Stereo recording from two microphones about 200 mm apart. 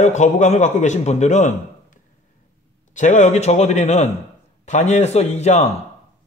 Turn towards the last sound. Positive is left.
turn(degrees=35)  # may be behind; listen again after turning